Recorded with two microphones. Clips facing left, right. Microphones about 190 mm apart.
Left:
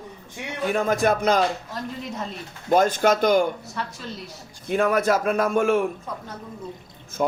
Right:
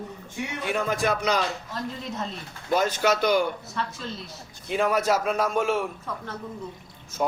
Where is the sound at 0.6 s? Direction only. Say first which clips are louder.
Left 5 dB; 45° left (ahead or behind).